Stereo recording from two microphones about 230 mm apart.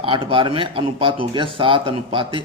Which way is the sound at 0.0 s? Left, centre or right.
Right.